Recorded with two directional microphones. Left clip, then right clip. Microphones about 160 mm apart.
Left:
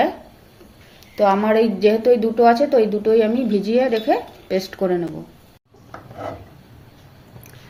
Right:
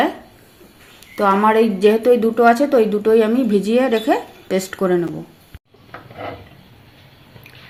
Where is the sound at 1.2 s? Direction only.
55° right (ahead or behind).